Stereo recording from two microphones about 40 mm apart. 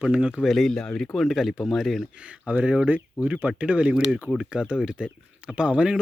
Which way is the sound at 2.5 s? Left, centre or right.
Right.